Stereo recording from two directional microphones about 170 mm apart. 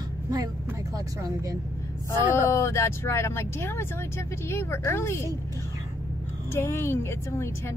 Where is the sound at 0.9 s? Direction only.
20° right (ahead or behind).